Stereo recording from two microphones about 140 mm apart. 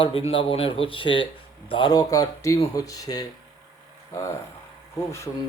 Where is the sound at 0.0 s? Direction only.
40° left (ahead or behind); by 3.2 s 25° left (ahead or behind).